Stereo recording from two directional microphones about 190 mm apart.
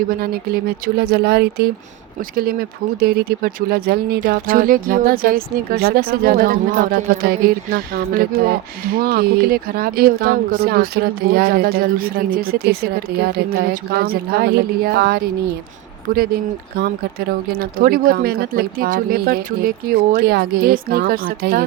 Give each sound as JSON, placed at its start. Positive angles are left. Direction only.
{"t": 0.2, "sound": "speech", "side_deg": -55}